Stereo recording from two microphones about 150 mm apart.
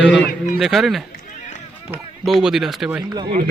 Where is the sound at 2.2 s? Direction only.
Centre (ahead or behind).